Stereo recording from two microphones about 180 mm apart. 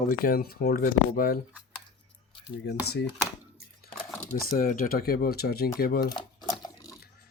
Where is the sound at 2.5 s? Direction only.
65° left (ahead or behind).